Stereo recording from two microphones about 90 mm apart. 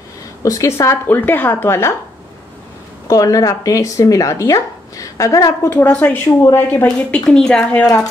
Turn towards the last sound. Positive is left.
turn(degrees=10)  # may be behind; listen again after turning